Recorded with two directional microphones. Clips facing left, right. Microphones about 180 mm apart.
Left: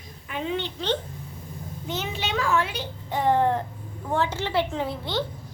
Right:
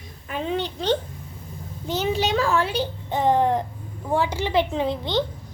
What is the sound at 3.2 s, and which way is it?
A woman's voice, 15° right (ahead or behind).